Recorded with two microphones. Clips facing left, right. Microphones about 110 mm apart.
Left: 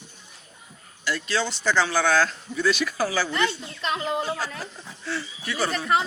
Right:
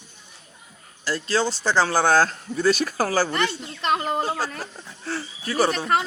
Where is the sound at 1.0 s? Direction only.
35° right (ahead or behind).